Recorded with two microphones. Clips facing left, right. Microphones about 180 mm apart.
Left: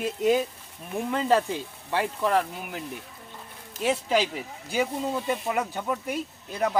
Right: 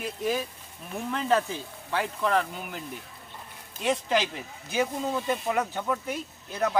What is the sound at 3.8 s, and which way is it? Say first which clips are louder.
Speech: left 2 dB; 10° left (ahead or behind).